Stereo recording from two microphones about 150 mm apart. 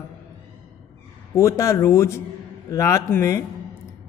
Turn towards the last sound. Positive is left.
turn(degrees=20)  # may be behind; listen again after turning